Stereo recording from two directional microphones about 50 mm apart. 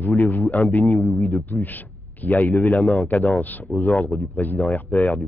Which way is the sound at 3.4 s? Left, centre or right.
Left.